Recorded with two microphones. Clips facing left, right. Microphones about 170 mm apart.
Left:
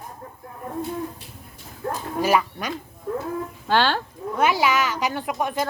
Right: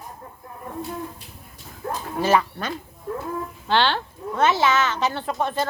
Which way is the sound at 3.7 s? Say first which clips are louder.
Even; 45° left (ahead or behind).